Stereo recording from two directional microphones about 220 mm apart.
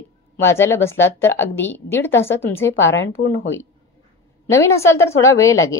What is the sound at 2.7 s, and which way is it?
Speech, 60° left (ahead or behind).